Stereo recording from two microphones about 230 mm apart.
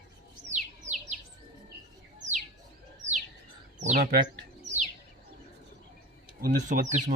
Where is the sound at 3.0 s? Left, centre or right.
Centre.